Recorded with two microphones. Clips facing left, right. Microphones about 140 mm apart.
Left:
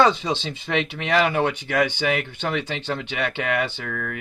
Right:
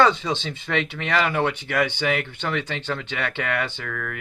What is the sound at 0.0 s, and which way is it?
Speech, 20° left (ahead or behind).